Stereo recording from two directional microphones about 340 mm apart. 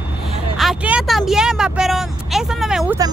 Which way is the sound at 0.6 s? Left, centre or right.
Centre.